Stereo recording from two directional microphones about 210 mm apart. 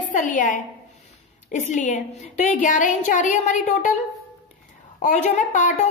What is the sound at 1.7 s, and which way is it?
A woman's voice, 35° left (ahead or behind).